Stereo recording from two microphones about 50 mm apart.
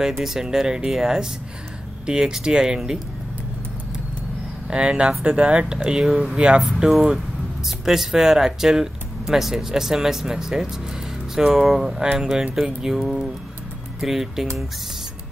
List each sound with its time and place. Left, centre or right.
0.0 s speech: centre
4.6 s speech: centre
6.9 s speech: centre